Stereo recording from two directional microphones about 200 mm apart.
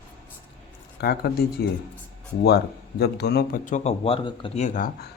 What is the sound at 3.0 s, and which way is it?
Speech, 55° left (ahead or behind).